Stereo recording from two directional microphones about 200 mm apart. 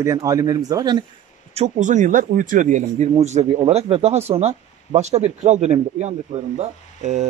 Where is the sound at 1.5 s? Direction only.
35° right (ahead or behind).